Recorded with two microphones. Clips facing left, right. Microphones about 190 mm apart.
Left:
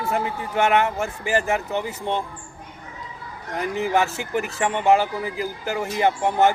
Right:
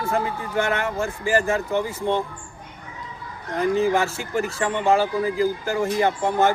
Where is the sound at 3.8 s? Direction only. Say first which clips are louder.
Left 3 dB; 20° left (ahead or behind).